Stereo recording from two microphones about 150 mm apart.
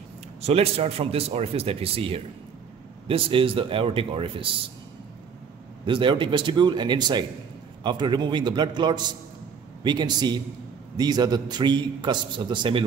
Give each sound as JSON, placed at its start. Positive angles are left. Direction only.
{"t": 0.4, "sound": "a man's voice", "side_deg": -45}
{"t": 5.9, "sound": "a man's voice", "side_deg": -35}